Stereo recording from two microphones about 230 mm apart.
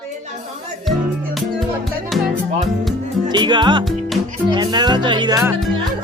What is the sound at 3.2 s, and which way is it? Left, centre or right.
Speech, centre.